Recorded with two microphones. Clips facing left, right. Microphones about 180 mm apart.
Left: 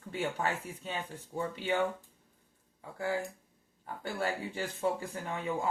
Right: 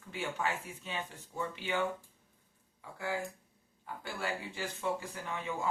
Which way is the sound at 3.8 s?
35° left (ahead or behind).